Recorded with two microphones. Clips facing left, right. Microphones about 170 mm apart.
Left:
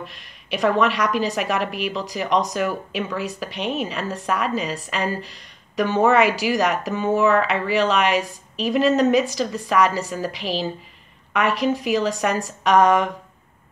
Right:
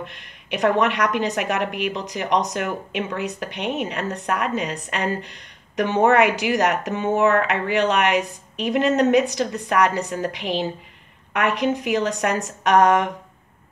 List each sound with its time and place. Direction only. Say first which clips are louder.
0.0 s a woman's voice: right 1 dB; 20° right (ahead or behind)